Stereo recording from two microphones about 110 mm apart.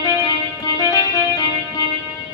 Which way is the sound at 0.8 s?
40° left (ahead or behind).